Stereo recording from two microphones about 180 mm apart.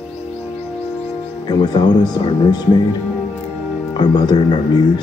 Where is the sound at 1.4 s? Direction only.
25° left (ahead or behind).